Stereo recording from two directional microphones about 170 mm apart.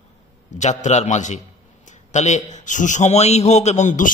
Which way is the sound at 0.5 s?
45° left (ahead or behind).